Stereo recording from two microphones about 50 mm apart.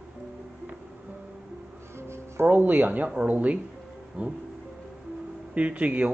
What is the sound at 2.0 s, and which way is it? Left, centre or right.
Music, right.